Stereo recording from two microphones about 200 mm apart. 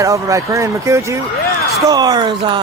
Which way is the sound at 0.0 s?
15° right (ahead or behind).